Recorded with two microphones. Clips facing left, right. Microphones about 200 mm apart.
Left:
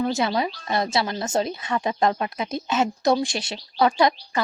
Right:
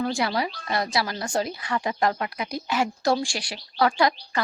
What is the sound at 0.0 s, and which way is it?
Speech, 20° left (ahead or behind).